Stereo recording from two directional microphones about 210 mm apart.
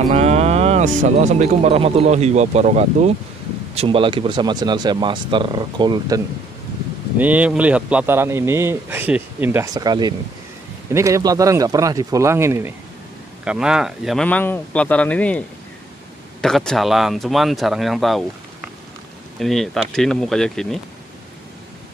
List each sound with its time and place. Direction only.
0.1 s speech: 30° right (ahead or behind)
7.2 s a man's voice: 5° right (ahead or behind)
19.4 s speech: centre (ahead or behind)